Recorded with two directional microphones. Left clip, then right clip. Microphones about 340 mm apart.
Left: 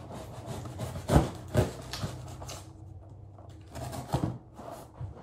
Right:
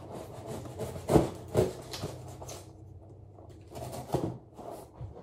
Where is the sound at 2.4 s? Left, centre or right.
Left.